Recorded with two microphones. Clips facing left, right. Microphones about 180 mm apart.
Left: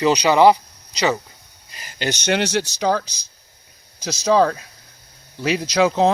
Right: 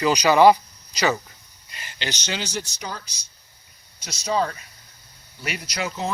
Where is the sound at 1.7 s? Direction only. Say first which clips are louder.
Left 7 dB; 40° left (ahead or behind).